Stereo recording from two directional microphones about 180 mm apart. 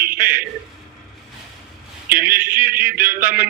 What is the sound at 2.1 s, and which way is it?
Speech, 55° right (ahead or behind).